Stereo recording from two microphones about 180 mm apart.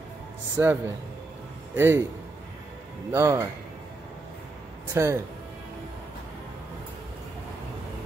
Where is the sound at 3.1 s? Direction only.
15° right (ahead or behind).